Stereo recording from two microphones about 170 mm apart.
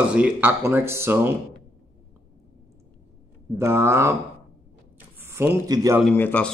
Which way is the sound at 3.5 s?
15° right (ahead or behind).